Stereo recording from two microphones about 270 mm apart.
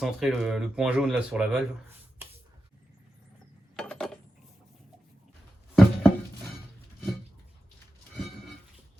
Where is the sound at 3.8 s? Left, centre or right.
Centre.